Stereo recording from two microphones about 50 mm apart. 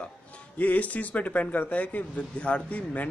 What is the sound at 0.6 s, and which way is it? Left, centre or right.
Speech, left.